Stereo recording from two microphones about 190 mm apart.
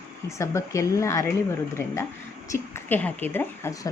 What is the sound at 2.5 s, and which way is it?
Speech, 15° left (ahead or behind).